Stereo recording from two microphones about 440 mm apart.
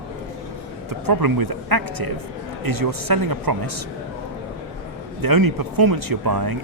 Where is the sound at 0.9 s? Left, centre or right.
Right.